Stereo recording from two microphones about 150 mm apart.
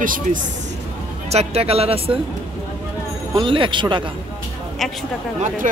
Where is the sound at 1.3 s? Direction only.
45° right (ahead or behind).